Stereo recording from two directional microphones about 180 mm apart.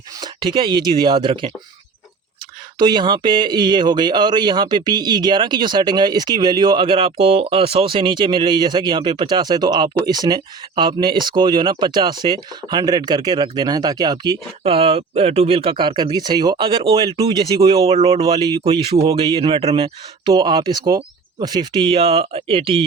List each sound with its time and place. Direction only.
0.2 s speech: 25° right (ahead or behind)
2.7 s speech: 25° right (ahead or behind)
14.6 s speech: 35° right (ahead or behind)